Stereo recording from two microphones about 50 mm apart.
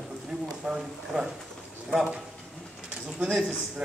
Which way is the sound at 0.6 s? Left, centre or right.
Centre.